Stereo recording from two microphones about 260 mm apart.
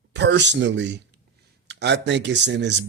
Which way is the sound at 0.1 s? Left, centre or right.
Right.